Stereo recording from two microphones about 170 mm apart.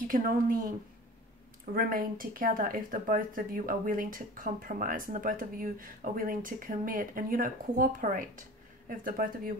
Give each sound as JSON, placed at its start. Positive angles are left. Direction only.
{"t": 0.1, "sound": "speech", "side_deg": -55}